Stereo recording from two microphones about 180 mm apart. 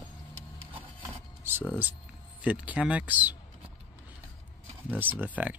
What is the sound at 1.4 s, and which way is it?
Speech, 10° right (ahead or behind).